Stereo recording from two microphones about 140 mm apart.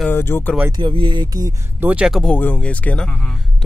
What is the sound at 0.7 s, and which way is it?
Speech, 35° right (ahead or behind).